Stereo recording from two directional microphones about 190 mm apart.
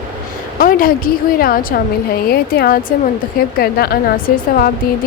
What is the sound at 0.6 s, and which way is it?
A woman's voice, 50° left (ahead or behind).